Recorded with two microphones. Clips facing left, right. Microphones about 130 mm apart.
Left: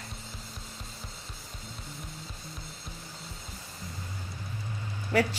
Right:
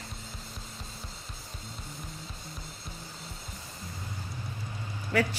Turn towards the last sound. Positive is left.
turn(degrees=30)  # may be behind; listen again after turning